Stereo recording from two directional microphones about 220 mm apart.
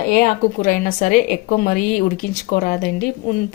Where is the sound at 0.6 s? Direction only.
40° left (ahead or behind).